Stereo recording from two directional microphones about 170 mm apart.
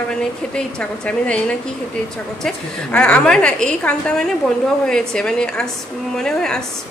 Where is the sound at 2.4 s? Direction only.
5° left (ahead or behind).